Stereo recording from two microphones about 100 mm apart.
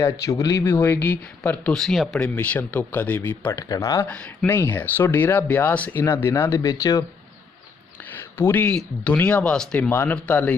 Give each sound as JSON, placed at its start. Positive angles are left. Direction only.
{"t": 0.0, "sound": "speech", "side_deg": 35}
{"t": 0.6, "sound": "speech", "side_deg": 20}
{"t": 1.7, "sound": "speech", "side_deg": 5}
{"t": 2.1, "sound": "speech", "side_deg": 15}
{"t": 3.5, "sound": "speech", "side_deg": 35}
{"t": 4.0, "sound": "speech", "side_deg": 15}
{"t": 8.4, "sound": "speech", "side_deg": 20}
{"t": 9.9, "sound": "speech", "side_deg": 20}